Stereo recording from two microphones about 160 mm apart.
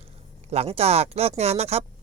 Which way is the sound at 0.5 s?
40° right (ahead or behind).